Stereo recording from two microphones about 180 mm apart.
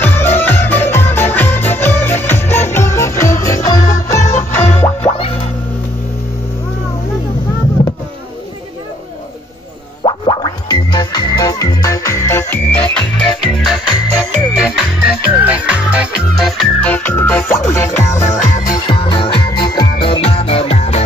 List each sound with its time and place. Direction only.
0.0 s music: 10° left (ahead or behind)
7.8 s a sound: 45° left (ahead or behind)
10.0 s music: 25° left (ahead or behind)
18.2 s music: 40° left (ahead or behind)
18.9 s music: 30° left (ahead or behind)